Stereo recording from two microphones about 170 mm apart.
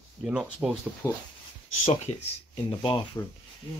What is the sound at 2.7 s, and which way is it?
Speech, 30° left (ahead or behind).